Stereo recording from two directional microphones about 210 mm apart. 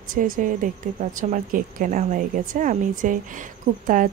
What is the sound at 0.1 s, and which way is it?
A woman's voice, 40° right (ahead or behind).